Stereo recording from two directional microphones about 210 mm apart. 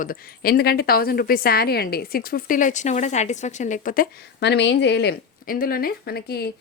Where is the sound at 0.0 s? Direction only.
45° left (ahead or behind).